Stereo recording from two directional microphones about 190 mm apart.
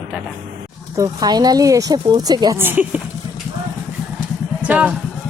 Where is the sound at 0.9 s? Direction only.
20° right (ahead or behind).